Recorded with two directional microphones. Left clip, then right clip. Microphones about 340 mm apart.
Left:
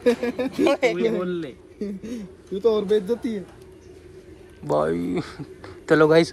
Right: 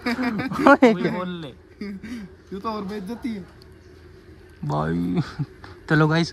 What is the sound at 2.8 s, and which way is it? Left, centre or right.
Speech, centre.